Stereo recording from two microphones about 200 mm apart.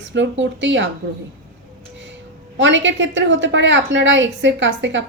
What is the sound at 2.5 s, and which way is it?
A woman's voice, 65° right (ahead or behind).